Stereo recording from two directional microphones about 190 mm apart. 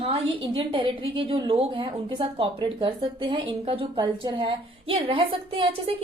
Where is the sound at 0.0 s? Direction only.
30° right (ahead or behind).